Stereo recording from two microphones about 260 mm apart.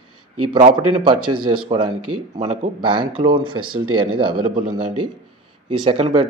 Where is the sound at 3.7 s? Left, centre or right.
Right.